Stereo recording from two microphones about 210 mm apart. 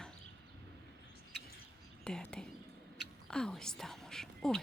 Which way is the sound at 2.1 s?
5° left (ahead or behind).